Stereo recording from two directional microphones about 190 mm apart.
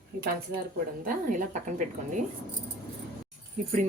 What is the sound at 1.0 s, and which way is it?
Speech, 45° right (ahead or behind).